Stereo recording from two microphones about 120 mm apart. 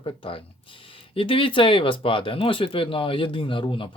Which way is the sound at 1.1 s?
50° left (ahead or behind).